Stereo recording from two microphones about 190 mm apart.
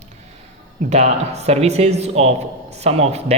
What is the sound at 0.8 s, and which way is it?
A man's voice, 35° right (ahead or behind).